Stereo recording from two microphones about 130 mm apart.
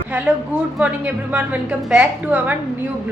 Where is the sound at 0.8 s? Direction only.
10° right (ahead or behind).